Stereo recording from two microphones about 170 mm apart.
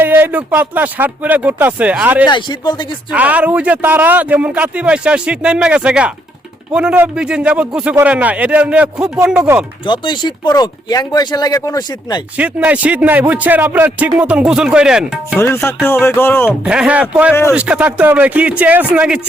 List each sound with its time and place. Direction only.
0.0 s speech: 10° right (ahead or behind)
2.2 s speech: 25° left (ahead or behind)
3.1 s speech: 10° right (ahead or behind)
9.8 s speech: 25° left (ahead or behind)
12.4 s speech: 10° right (ahead or behind)
15.4 s speech: 15° left (ahead or behind)
16.5 s speech: 5° right (ahead or behind)